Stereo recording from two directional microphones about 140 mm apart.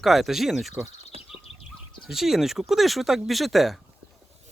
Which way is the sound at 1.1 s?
45° right (ahead or behind).